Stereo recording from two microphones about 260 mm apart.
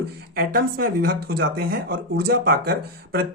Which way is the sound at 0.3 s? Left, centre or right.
Right.